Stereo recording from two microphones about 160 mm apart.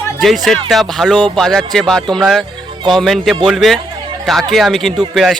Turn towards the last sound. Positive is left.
turn(degrees=0)  # may be behind; listen again after turning